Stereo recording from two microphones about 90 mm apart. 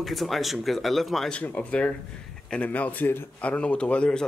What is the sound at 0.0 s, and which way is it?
Speech, centre (ahead or behind).